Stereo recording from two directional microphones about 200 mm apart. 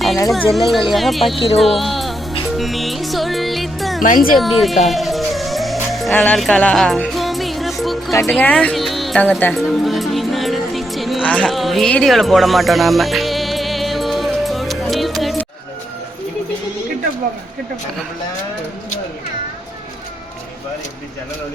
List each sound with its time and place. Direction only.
0.5 s speech: centre (ahead or behind)
1.5 s music: centre (ahead or behind)
4.0 s speech: 45° left (ahead or behind)
4.4 s speech: centre (ahead or behind)
4.9 s music: centre (ahead or behind)